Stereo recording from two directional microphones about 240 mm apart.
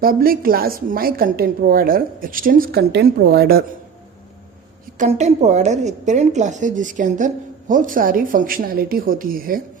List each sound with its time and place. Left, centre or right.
0.0 s a woman's voice: right
4.9 s a woman's voice: right